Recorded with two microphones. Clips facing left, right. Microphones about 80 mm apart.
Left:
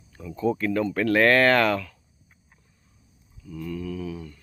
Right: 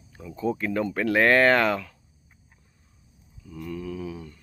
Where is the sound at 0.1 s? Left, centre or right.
Centre.